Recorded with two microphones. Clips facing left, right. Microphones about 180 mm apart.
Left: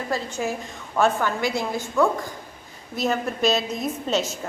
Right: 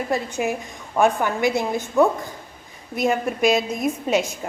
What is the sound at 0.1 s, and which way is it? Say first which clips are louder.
A woman's voice: right 2 dB; 20° right (ahead or behind).